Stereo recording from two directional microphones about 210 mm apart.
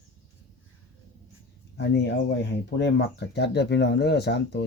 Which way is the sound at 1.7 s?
55° left (ahead or behind).